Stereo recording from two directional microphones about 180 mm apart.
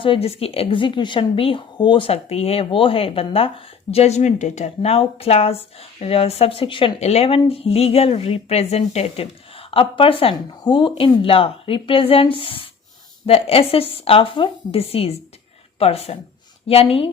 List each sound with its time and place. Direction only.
0.0 s speech: 30° left (ahead or behind)